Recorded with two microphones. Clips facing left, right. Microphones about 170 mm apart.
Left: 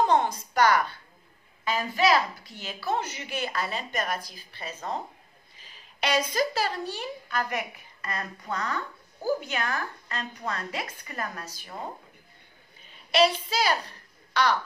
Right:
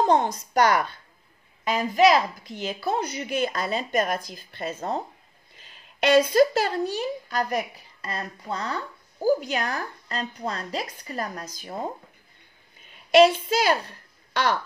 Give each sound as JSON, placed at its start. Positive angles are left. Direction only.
{"t": 0.0, "sound": "speech", "side_deg": -45}
{"t": 6.0, "sound": "speech", "side_deg": -50}
{"t": 13.1, "sound": "speech", "side_deg": -50}